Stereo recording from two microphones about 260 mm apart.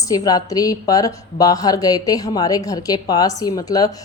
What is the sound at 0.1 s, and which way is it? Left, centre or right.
A woman's voice, centre.